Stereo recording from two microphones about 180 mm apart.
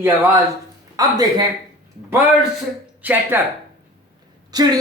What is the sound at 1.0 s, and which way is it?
Speech, 20° right (ahead or behind).